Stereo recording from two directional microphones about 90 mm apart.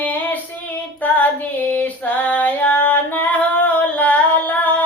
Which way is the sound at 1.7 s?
15° left (ahead or behind).